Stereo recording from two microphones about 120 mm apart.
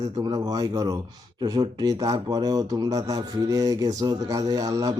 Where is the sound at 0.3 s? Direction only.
30° right (ahead or behind).